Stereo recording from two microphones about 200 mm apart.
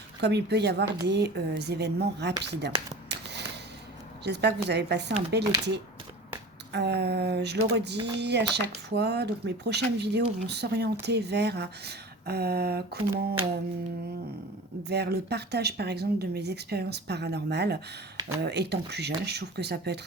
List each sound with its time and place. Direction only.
0.2 s speech: 55° right (ahead or behind)
3.1 s a sound: 60° right (ahead or behind)
4.2 s speech: 55° right (ahead or behind)
14.8 s speech: 55° right (ahead or behind)